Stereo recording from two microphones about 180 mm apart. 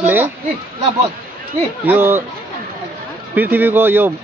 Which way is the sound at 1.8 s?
10° right (ahead or behind).